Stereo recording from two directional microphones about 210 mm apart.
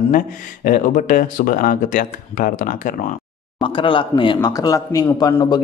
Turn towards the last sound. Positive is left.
turn(degrees=15)  # may be behind; listen again after turning